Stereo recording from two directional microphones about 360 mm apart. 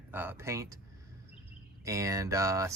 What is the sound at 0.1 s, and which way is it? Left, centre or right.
Speech, centre.